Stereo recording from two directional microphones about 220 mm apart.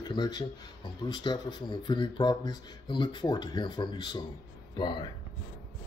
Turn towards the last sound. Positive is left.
turn(degrees=20)  # may be behind; listen again after turning